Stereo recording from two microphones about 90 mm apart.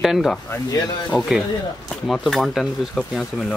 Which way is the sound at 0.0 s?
5° right (ahead or behind).